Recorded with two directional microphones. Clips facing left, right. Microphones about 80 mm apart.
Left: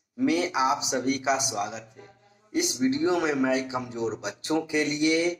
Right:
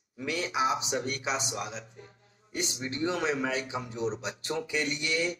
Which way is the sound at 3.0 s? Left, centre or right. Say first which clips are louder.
Left 1 dB; left.